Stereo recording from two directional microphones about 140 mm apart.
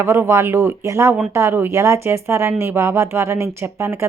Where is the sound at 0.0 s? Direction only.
15° right (ahead or behind).